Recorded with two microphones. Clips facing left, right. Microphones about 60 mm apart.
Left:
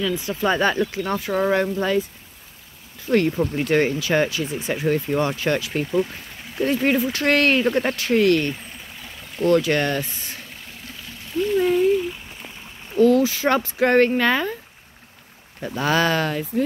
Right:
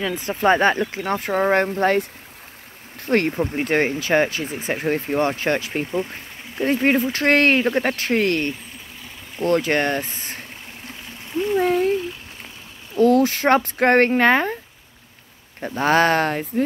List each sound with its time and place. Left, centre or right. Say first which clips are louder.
0.0 s speech: right 2 dB; right
3.3 s speech: left 1 dB; right
11.5 s a sound: left 1 dB; right
12.9 s speech: even; right
15.6 s speech: right 3 dB; right